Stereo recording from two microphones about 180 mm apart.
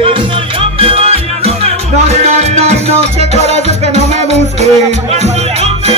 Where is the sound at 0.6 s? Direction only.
30° right (ahead or behind).